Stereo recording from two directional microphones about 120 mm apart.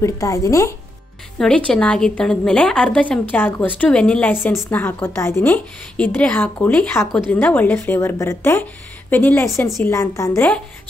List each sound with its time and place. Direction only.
0.0 s a woman's voice: 30° left (ahead or behind)
1.4 s a woman's voice: 5° left (ahead or behind); by 10.5 s 25° left (ahead or behind)